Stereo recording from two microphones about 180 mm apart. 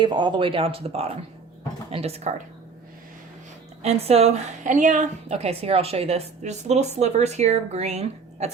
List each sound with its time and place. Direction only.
0.0 s a woman's voice: 25° right (ahead or behind)
3.8 s a woman's voice: 35° right (ahead or behind)